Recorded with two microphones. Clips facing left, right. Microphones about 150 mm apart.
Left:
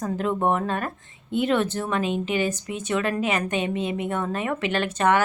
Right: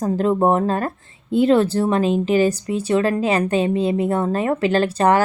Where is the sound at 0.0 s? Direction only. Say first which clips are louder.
Right 6 dB; 35° right (ahead or behind).